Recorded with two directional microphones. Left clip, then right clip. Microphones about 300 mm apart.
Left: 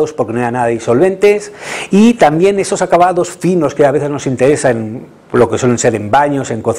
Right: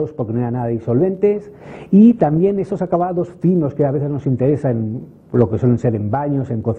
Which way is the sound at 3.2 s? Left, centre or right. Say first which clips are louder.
Left 6 dB; centre.